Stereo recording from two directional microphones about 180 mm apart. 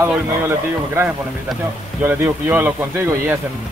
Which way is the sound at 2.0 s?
10° right (ahead or behind).